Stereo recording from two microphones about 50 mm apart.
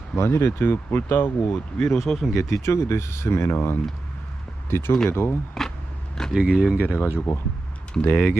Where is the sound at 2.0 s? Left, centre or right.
Centre.